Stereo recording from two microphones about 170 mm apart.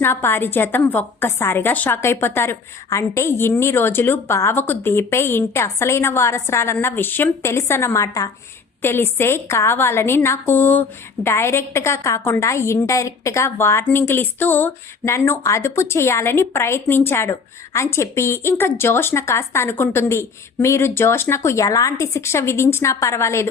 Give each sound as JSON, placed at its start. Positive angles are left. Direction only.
{"t": 0.0, "sound": "a woman's voice", "side_deg": 15}